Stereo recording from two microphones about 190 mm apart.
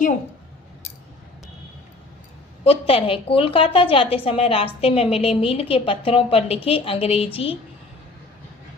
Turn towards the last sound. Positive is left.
turn(degrees=30)  # may be behind; listen again after turning